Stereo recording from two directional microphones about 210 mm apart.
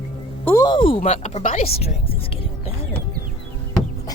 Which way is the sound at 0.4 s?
15° left (ahead or behind).